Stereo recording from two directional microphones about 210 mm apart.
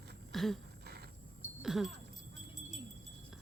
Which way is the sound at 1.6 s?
Centre (ahead or behind).